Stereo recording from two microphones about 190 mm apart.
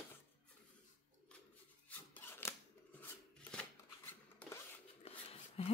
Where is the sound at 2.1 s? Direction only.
10° left (ahead or behind).